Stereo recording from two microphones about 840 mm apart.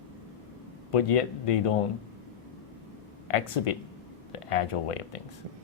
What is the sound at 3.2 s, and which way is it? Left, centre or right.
Speech, left.